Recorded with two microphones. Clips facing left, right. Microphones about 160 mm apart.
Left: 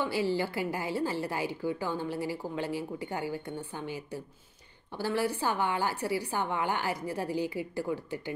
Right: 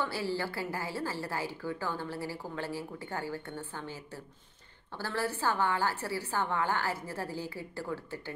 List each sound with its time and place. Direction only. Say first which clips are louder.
0.0 s a woman's voice: left 4 dB; 15° left (ahead or behind)